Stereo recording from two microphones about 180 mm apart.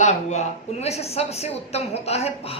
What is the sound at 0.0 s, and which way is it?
A woman's voice, 40° left (ahead or behind).